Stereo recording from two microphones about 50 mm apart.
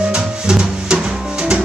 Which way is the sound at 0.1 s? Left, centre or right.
Centre.